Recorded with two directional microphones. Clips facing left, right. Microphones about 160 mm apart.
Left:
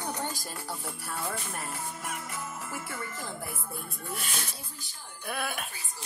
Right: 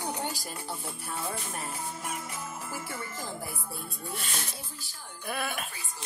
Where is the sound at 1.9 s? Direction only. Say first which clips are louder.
Right 1 dB; 20° right (ahead or behind).